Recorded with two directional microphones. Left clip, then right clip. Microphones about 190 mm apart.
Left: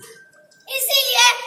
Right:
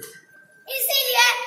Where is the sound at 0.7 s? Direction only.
15° right (ahead or behind).